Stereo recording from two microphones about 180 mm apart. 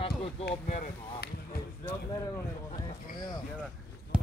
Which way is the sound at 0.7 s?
40° left (ahead or behind).